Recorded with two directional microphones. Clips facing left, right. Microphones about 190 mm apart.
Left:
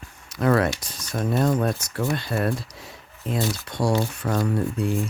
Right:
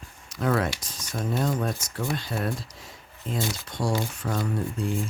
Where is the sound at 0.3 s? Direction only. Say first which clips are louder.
Left 5 dB; 65° left (ahead or behind).